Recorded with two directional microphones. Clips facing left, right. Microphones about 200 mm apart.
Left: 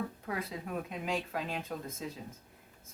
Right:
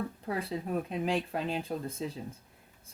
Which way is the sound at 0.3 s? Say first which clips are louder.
Right 4 dB; 30° right (ahead or behind).